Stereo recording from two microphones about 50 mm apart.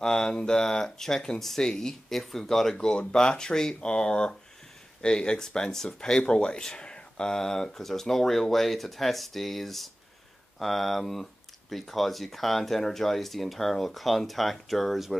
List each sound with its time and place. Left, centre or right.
0.0 s speech: centre